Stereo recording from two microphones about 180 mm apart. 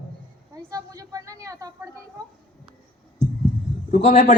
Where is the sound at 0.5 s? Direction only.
20° right (ahead or behind).